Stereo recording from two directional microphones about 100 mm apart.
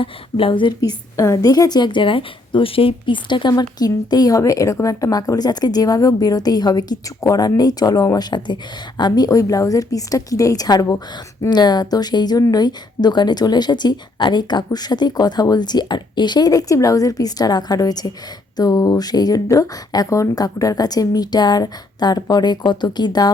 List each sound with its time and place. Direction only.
0.0 s a woman's voice: 60° left (ahead or behind)
0.8 s speech: 35° left (ahead or behind); by 3.5 s 50° left (ahead or behind)
3.5 s speech: 40° left (ahead or behind)